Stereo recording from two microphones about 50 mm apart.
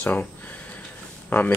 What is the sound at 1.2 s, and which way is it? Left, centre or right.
Speech, left.